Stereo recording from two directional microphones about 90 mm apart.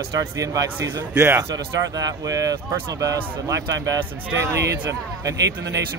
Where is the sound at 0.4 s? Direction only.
40° right (ahead or behind).